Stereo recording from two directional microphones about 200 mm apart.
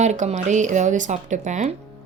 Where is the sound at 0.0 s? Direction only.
35° right (ahead or behind).